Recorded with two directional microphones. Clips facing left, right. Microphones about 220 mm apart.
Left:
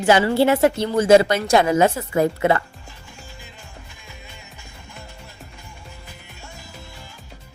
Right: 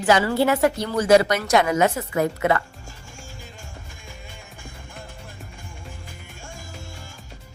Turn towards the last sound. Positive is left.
turn(degrees=-45)  # may be behind; listen again after turning